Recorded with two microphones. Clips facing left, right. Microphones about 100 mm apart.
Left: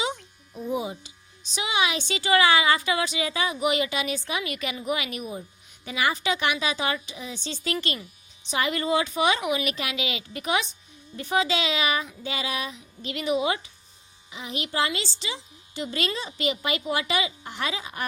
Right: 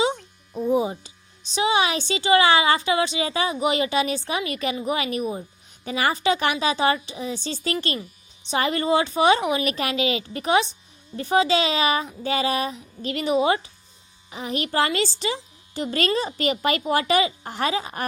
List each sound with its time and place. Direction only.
0.7 s speech: 35° right (ahead or behind)